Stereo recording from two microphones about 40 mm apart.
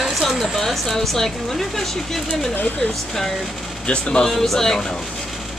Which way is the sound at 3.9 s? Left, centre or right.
Left.